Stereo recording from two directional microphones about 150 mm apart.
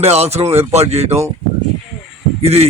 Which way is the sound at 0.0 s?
45° right (ahead or behind).